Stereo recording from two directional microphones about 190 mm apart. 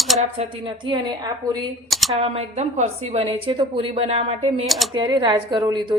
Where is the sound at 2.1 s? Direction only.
30° right (ahead or behind).